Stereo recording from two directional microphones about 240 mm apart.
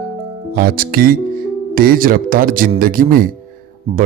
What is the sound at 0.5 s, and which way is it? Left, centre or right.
Speech, right.